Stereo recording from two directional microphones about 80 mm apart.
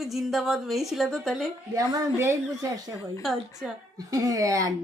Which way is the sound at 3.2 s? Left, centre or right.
Centre.